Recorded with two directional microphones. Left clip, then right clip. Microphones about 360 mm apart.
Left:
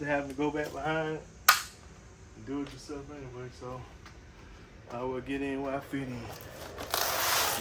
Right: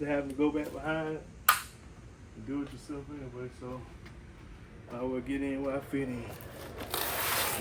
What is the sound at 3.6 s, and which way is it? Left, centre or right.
Speech, centre.